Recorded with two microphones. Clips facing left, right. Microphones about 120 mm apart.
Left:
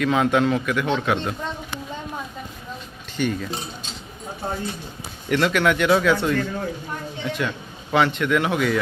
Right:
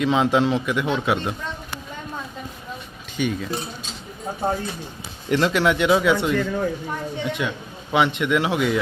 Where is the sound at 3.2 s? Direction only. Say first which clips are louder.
Even; 5° right (ahead or behind).